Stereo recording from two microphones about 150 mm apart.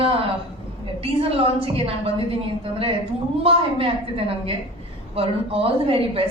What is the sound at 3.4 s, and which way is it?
A woman's voice, 40° right (ahead or behind).